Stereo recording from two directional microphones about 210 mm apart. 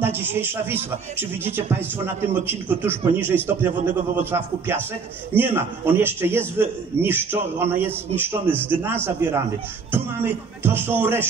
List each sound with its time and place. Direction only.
0.0 s a man's voice: 10° right (ahead or behind)